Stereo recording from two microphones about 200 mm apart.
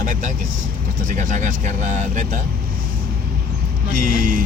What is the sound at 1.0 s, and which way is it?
Speech, 40° right (ahead or behind).